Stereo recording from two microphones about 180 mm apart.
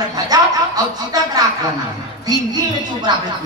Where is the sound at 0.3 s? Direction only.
20° right (ahead or behind).